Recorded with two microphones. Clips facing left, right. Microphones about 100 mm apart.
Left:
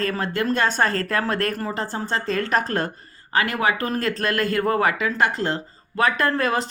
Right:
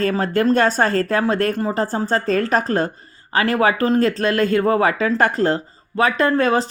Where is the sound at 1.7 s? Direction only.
35° right (ahead or behind).